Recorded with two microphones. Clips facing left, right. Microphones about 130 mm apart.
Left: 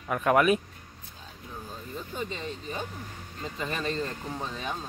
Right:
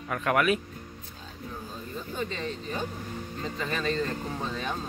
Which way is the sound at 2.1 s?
10° left (ahead or behind).